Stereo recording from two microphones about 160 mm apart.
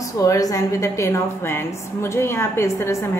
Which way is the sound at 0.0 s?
20° left (ahead or behind).